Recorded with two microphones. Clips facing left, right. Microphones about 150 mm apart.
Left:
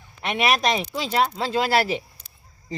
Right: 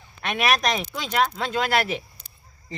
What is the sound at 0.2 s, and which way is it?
Speech, 25° left (ahead or behind).